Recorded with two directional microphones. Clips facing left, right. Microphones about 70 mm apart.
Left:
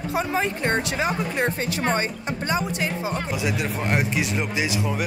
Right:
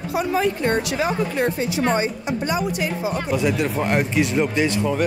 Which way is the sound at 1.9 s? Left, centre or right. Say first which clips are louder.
Right 4 dB; left.